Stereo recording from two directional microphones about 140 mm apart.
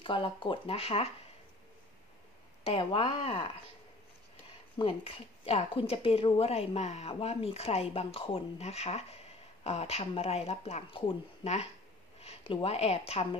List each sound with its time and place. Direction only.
0.0 s speech: 40° left (ahead or behind)
2.6 s speech: 40° left (ahead or behind)
4.7 s speech: 40° left (ahead or behind)